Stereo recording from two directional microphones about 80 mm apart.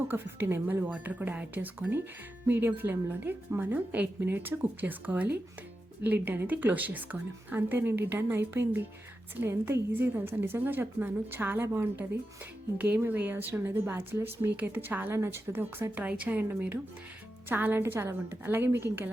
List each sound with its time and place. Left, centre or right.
0.1 s a woman's voice: right
0.9 s a woman's voice: centre
16.0 s a woman's voice: centre